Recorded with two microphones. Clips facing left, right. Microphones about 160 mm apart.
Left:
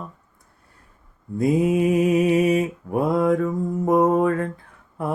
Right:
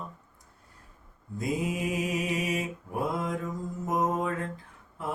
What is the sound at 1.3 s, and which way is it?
Mantra, 60° left (ahead or behind).